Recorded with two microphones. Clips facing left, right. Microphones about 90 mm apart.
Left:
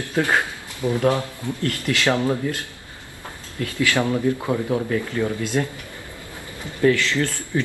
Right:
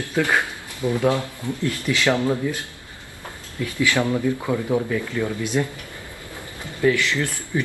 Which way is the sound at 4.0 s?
20° left (ahead or behind).